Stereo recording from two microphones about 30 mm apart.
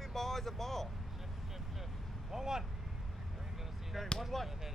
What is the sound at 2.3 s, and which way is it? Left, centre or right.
Vehicle, centre.